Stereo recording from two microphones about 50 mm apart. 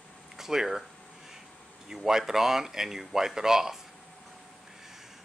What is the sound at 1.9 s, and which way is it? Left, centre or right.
Speech, centre.